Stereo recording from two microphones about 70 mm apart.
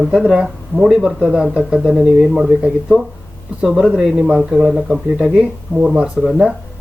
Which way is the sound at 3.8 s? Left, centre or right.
Centre.